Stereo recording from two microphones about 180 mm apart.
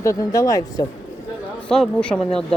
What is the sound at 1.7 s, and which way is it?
Speech, 5° left (ahead or behind).